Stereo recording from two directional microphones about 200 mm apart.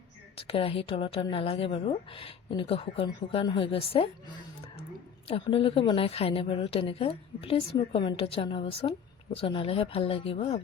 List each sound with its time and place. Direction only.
0.3 s a woman's voice: 30° left (ahead or behind)